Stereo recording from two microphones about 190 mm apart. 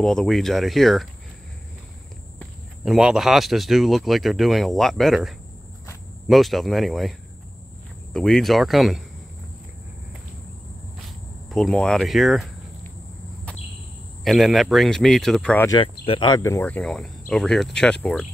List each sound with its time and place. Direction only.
0.0 s speech: 5° left (ahead or behind)
2.3 s speech: centre (ahead or behind)
11.4 s speech: centre (ahead or behind)
14.2 s speech: centre (ahead or behind)
16.1 s speech: 25° left (ahead or behind); by 18.2 s 5° left (ahead or behind)